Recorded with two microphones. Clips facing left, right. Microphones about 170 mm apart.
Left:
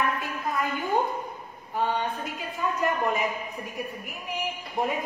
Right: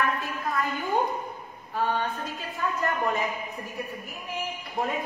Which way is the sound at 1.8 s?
20° left (ahead or behind).